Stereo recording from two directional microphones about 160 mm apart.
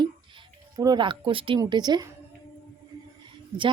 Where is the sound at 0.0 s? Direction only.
30° right (ahead or behind).